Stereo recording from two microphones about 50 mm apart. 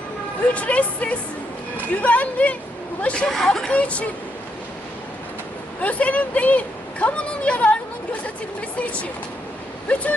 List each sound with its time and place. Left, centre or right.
0.5 s speech: left
3.2 s speech: centre
3.7 s speech: left
5.8 s speech: left
9.9 s speech: left